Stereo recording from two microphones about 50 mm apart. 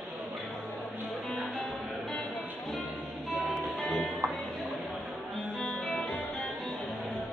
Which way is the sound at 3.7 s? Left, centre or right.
Centre.